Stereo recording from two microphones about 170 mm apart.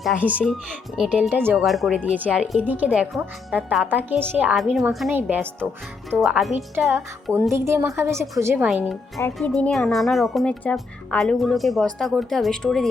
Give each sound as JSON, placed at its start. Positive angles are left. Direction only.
{"t": 0.3, "sound": "speech", "side_deg": -5}
{"t": 5.1, "sound": "speech", "side_deg": -10}
{"t": 6.1, "sound": "speech", "side_deg": 0}
{"t": 6.7, "sound": "speech", "side_deg": -15}